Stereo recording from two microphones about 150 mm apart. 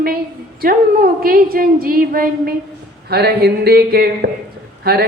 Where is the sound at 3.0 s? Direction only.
90° right.